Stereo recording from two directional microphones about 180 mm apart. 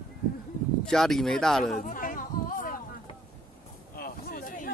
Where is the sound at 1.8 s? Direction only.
50° left (ahead or behind).